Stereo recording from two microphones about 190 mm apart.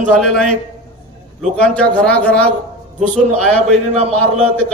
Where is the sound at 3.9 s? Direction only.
35° right (ahead or behind).